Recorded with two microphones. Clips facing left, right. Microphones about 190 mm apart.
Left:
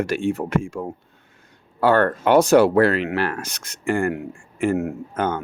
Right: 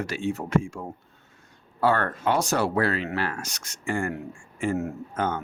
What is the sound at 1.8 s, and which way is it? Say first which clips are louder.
Speech: left 6 dB; 65° left (ahead or behind).